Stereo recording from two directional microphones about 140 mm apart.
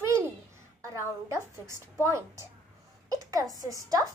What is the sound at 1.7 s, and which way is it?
A child's voice, 20° right (ahead or behind).